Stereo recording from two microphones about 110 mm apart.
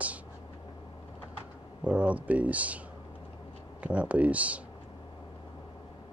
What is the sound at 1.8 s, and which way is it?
Speech, 10° right (ahead or behind).